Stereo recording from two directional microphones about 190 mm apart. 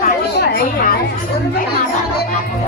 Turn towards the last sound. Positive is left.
turn(degrees=50)  # may be behind; listen again after turning